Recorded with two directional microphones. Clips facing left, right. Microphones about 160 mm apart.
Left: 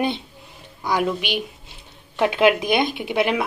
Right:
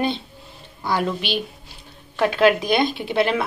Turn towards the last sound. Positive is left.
turn(degrees=15)  # may be behind; listen again after turning